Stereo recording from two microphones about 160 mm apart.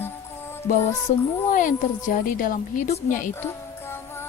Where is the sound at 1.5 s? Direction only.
55° left (ahead or behind).